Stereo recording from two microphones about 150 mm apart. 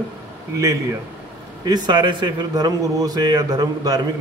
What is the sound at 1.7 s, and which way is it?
A man's voice, 30° right (ahead or behind).